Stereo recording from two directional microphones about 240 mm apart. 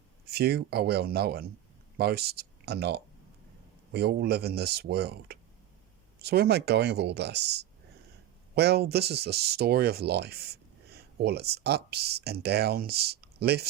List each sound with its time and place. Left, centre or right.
0.3 s speech: right